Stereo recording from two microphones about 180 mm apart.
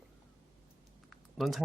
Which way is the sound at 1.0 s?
Centre (ahead or behind).